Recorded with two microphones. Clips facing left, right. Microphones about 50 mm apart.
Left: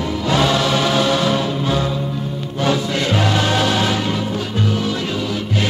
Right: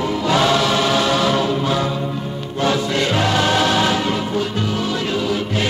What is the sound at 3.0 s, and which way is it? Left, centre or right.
Music, right.